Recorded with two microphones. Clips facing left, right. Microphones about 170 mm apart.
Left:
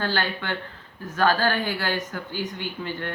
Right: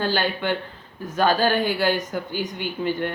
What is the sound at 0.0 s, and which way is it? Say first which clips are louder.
Speech: right 4 dB; 15° right (ahead or behind).